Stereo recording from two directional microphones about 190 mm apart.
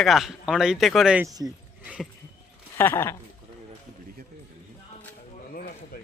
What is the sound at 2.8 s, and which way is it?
Speech, 10° left (ahead or behind).